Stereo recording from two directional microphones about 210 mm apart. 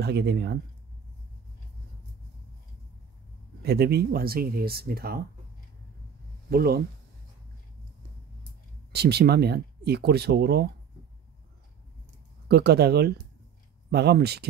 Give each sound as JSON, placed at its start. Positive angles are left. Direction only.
{"t": 0.0, "sound": "speech", "side_deg": -50}
{"t": 3.6, "sound": "speech", "side_deg": -50}
{"t": 6.5, "sound": "speech", "side_deg": -50}
{"t": 8.9, "sound": "speech", "side_deg": -50}
{"t": 12.4, "sound": "speech", "side_deg": -50}